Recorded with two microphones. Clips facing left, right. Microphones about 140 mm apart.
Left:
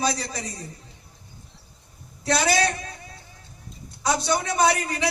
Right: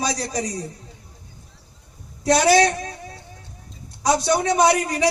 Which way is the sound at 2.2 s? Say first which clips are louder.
Right 6 dB; 35° right (ahead or behind).